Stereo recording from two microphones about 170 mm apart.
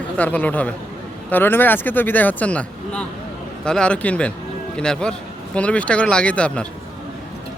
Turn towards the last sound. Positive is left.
turn(degrees=5)  # may be behind; listen again after turning